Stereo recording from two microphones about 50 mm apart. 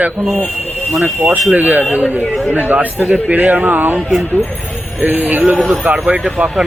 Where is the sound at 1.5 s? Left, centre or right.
Right.